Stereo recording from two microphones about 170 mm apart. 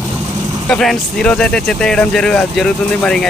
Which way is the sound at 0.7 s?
5° left (ahead or behind).